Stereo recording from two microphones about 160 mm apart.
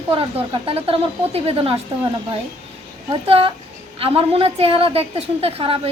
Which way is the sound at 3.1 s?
35° right (ahead or behind).